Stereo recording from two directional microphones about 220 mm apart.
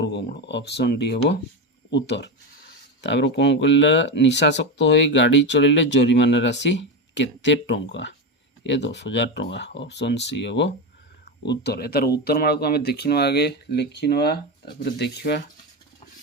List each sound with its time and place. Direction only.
0.0 s speech: 50° left (ahead or behind)